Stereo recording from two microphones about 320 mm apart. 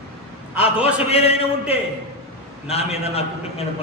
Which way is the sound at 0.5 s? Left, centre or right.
Centre.